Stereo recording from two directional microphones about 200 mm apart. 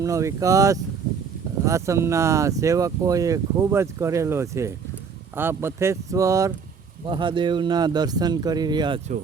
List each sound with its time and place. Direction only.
0.0 s speech: 15° right (ahead or behind)